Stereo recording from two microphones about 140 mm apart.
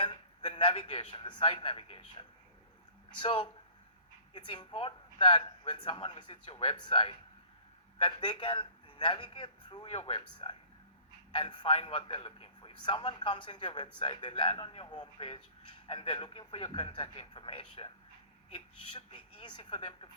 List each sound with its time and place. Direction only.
0.5 s a man's voice: 40° left (ahead or behind)
4.4 s a man's voice: 30° left (ahead or behind)